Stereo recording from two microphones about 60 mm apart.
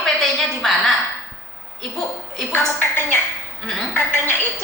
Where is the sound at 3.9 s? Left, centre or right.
Left.